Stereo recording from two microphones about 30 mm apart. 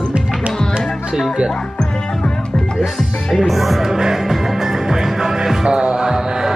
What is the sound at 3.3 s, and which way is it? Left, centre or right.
Speech, centre.